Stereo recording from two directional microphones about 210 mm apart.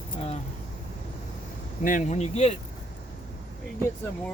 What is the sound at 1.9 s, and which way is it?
Speech, 35° left (ahead or behind).